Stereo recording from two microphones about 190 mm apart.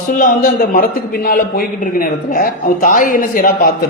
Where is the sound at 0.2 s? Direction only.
50° left (ahead or behind).